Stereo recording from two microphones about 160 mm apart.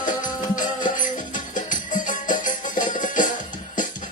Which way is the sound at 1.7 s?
55° left (ahead or behind).